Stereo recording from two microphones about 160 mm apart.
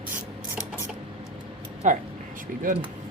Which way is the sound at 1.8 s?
50° right (ahead or behind).